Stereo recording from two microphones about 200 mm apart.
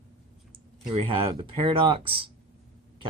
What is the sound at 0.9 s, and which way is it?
Speech, 25° right (ahead or behind).